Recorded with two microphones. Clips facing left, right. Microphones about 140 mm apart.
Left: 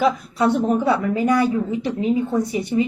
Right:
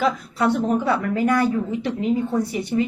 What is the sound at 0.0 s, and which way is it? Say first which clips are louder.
A woman's voice: left 2 dB; 20° left (ahead or behind).